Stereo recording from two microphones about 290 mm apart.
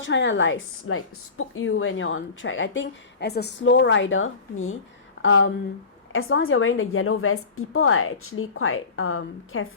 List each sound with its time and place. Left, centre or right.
0.0 s a woman's voice: left